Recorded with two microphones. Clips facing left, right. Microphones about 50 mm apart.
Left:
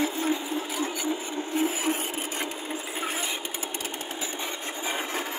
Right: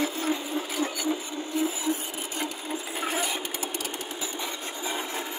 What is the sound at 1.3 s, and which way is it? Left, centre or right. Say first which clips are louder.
Wood: left 1 dB; left.